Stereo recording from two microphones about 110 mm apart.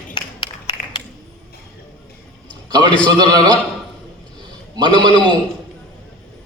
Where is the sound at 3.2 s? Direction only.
40° right (ahead or behind).